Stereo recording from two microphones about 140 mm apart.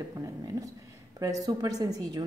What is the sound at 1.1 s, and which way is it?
A woman's voice, 25° right (ahead or behind).